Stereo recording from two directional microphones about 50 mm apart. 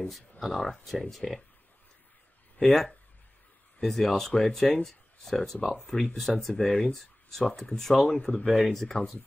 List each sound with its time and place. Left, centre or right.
0.0 s speech: centre
2.7 s speech: centre
8.1 s speech: centre
8.5 s speech: centre
8.7 s speech: centre